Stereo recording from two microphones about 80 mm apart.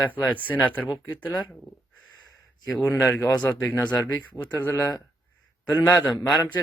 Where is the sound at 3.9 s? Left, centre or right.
Left.